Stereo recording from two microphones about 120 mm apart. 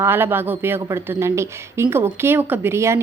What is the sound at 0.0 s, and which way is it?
A woman's voice, 20° right (ahead or behind).